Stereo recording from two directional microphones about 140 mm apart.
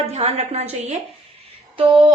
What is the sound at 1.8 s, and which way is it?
Speech, 35° right (ahead or behind).